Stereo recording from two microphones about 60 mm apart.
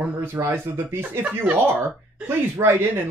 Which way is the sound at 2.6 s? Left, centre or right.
Right.